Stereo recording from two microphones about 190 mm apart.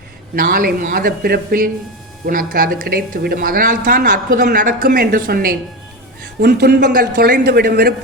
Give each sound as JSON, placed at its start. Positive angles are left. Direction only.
{"t": 0.3, "sound": "speech", "side_deg": -50}